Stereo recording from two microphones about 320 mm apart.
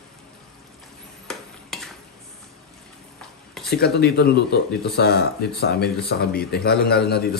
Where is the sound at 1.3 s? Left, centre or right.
Centre.